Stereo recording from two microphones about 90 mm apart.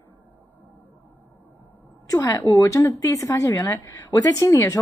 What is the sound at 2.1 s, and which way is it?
A woman's voice, 40° left (ahead or behind).